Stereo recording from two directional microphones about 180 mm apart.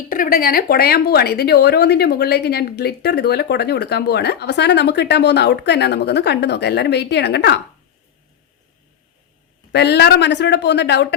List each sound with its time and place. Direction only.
0.1 s speech: 50° left (ahead or behind); by 7.6 s 70° left (ahead or behind)
9.7 s speech: 70° left (ahead or behind)